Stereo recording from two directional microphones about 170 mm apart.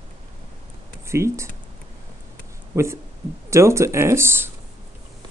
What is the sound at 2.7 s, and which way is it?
Speech, 15° right (ahead or behind).